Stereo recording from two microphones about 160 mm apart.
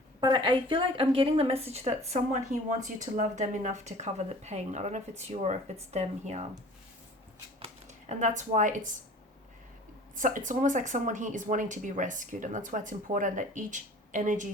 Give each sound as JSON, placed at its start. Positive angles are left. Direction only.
{"t": 0.2, "sound": "a woman's voice", "side_deg": -30}
{"t": 7.6, "sound": "speech", "side_deg": -45}
{"t": 10.2, "sound": "speech", "side_deg": -55}